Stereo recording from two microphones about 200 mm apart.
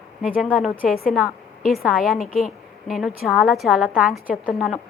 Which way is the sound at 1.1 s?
Centre (ahead or behind).